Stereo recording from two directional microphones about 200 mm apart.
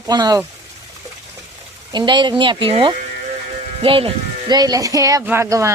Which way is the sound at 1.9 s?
20° right (ahead or behind).